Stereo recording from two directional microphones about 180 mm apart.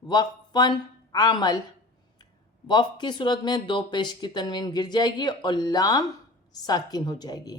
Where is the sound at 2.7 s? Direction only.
25° left (ahead or behind).